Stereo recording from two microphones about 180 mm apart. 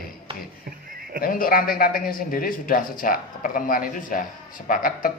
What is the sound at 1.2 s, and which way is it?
A man's voice, 55° left (ahead or behind).